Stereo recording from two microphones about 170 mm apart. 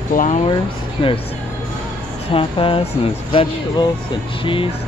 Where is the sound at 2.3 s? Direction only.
30° left (ahead or behind).